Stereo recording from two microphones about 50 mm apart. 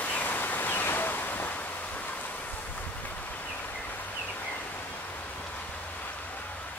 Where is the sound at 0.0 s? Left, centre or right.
Left.